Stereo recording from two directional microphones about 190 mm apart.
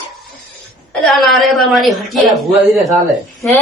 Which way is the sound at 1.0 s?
Centre (ahead or behind).